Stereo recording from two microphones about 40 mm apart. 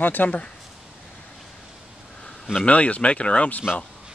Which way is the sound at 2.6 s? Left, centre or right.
Left.